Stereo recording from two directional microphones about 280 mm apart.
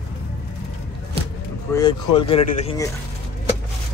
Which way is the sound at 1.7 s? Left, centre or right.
Centre.